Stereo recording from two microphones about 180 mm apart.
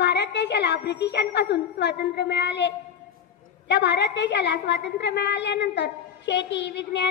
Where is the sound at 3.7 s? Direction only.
70° left (ahead or behind).